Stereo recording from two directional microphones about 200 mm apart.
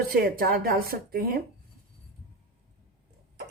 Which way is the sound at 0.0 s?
45° right (ahead or behind).